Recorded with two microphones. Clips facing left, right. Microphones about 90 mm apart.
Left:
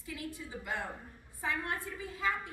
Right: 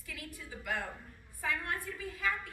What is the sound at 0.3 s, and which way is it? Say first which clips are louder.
A woman's voice: right 4 dB; 25° left (ahead or behind).